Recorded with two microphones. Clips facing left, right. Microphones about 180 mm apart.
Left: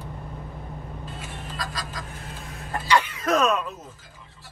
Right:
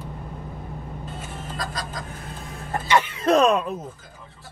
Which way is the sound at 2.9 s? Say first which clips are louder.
Right 3 dB; 30° right (ahead or behind).